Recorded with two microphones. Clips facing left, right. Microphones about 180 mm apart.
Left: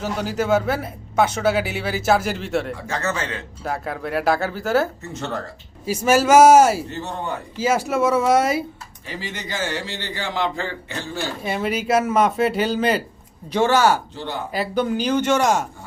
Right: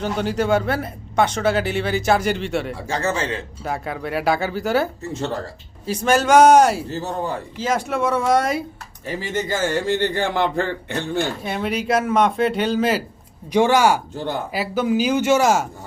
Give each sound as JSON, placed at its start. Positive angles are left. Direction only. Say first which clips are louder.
{"t": 0.0, "sound": "speech", "louder": "right 2 dB", "side_deg": 5}
{"t": 2.8, "sound": "a man's voice", "louder": "right 3 dB", "side_deg": -30}
{"t": 3.6, "sound": "a man's voice", "louder": "left 2 dB", "side_deg": 0}
{"t": 6.8, "sound": "a man's voice", "louder": "right 3 dB", "side_deg": -35}
{"t": 7.6, "sound": "speech", "louder": "left 2 dB", "side_deg": 5}
{"t": 9.0, "sound": "a man's voice", "louder": "right 7 dB", "side_deg": -50}
{"t": 11.4, "sound": "speech", "louder": "even", "side_deg": 0}
{"t": 13.5, "sound": "speech", "louder": "right 1 dB", "side_deg": -15}